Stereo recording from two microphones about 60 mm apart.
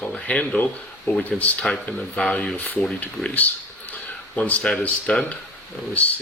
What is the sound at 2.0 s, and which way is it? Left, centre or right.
Speech, centre.